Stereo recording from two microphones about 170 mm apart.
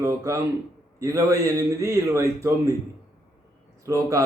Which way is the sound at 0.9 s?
20° right (ahead or behind).